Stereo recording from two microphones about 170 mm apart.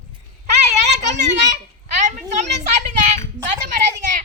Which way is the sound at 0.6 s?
40° right (ahead or behind).